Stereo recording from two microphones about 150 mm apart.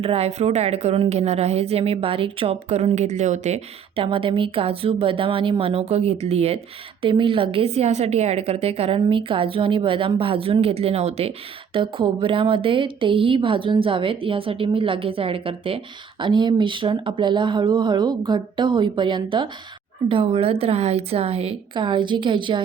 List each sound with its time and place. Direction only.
0.0 s a woman's voice: 40° right (ahead or behind)